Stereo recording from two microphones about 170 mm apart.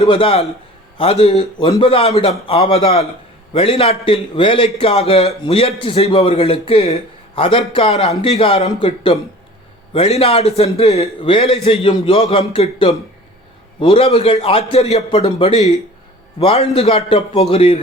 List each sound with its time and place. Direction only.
0.0 s a man's voice: 35° left (ahead or behind)